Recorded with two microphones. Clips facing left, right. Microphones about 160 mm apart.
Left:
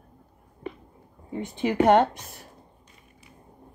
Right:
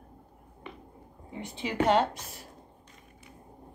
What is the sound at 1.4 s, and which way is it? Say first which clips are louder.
A woman's voice: left 7 dB; 55° left (ahead or behind).